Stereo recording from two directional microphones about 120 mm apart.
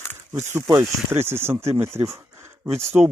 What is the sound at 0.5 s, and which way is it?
Speech, 20° right (ahead or behind).